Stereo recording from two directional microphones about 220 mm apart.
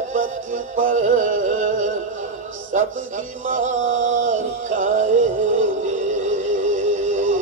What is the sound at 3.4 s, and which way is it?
Music, 35° right (ahead or behind).